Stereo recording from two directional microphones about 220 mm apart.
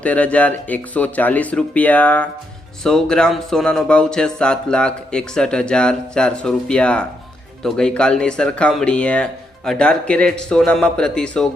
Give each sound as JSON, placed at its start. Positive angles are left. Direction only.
{"t": 0.0, "sound": "speech", "side_deg": 5}